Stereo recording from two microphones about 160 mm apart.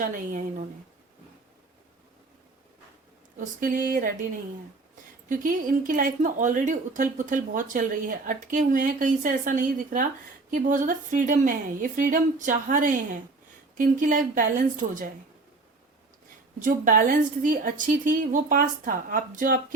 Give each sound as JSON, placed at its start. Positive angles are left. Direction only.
{"t": 0.0, "sound": "a woman's voice", "side_deg": -55}
{"t": 3.3, "sound": "a woman's voice", "side_deg": -55}
{"t": 5.3, "sound": "a woman's voice", "side_deg": -55}
{"t": 16.6, "sound": "a woman's voice", "side_deg": -55}